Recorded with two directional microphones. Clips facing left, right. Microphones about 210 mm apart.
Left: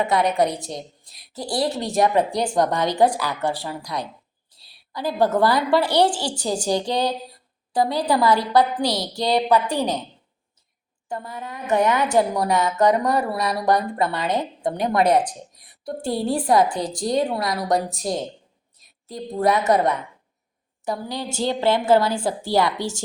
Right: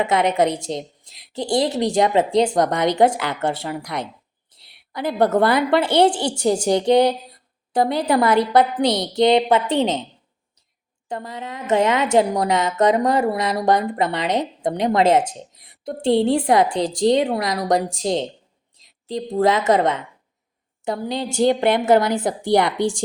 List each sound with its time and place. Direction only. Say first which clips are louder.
0.0 s speech: right 2 dB; 20° right (ahead or behind)
4.5 s a sound: right 3 dB; 20° right (ahead or behind)
5.2 s speech: right 2 dB; 20° right (ahead or behind)
11.1 s speech: right 2 dB; 20° right (ahead or behind)
18.8 s a sound: right 8 dB; 90° right
19.1 s speech: right 3 dB; 20° right (ahead or behind)